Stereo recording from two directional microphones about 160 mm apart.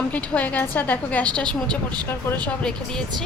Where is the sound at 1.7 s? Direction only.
25° right (ahead or behind).